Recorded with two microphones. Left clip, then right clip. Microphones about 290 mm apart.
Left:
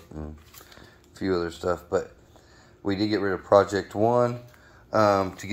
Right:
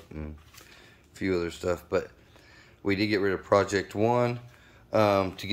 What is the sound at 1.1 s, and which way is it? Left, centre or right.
Speech, centre.